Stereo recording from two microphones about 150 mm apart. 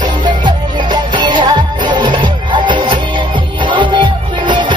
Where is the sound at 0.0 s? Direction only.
30° right (ahead or behind).